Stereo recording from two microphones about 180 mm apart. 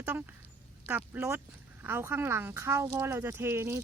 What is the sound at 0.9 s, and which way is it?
Speech, 10° right (ahead or behind).